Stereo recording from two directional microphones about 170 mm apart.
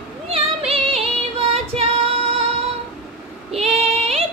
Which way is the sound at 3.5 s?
40° right (ahead or behind).